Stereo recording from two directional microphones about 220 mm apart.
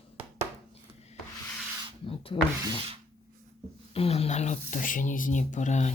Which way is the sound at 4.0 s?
25° left (ahead or behind).